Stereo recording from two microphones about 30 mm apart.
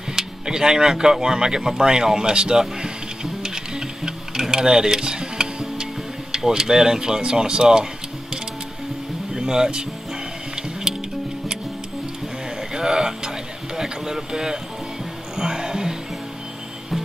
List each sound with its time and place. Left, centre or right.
0.1 s music: centre
0.8 s speech: centre
3.4 s music: right
6.3 s speech: centre
7.0 s speech: right
9.3 s speech: right
12.7 s a sound: centre
14.1 s speech: right
15.3 s music: centre